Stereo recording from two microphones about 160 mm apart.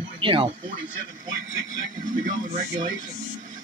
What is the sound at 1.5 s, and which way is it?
Speech, 50° right (ahead or behind).